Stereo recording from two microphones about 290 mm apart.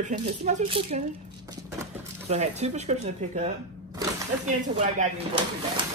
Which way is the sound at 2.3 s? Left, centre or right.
Right.